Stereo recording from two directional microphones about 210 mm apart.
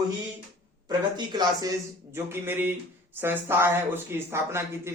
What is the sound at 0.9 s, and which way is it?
A man's voice, 20° right (ahead or behind).